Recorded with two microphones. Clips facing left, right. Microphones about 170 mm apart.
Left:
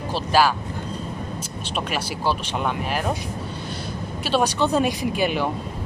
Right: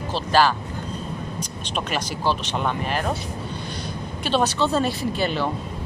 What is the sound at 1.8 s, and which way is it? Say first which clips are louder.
Speech: even; 5° left (ahead or behind).